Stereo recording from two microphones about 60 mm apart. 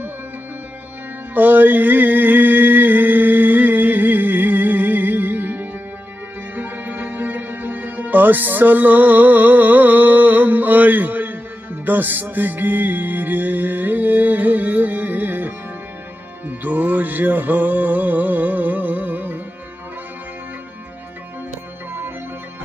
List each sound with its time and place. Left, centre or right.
1.3 s mantra: right
6.5 s music: right